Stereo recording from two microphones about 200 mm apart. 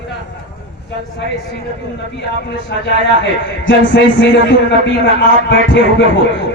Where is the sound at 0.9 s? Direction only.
60° left (ahead or behind).